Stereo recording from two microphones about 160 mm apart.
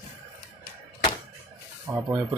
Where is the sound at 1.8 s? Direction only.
15° right (ahead or behind).